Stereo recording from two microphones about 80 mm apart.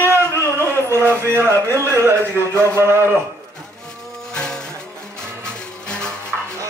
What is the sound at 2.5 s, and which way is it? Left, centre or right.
Speech, right.